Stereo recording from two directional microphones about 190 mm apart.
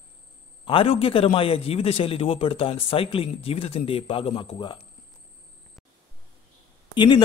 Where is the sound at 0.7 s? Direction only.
30° left (ahead or behind).